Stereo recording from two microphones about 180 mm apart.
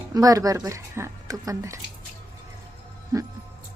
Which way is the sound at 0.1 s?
20° right (ahead or behind).